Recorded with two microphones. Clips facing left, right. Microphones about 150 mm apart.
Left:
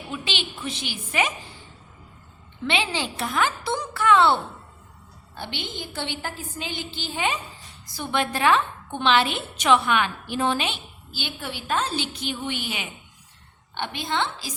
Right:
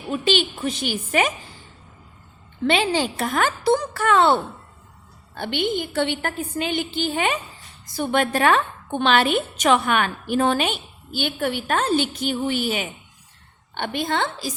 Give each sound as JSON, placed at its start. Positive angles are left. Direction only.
{"t": 0.1, "sound": "a woman's voice", "side_deg": -45}
{"t": 2.6, "sound": "a woman's voice", "side_deg": -45}
{"t": 5.4, "sound": "a woman's voice", "side_deg": -55}